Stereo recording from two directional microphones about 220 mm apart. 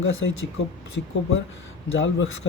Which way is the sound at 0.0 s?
65° left (ahead or behind).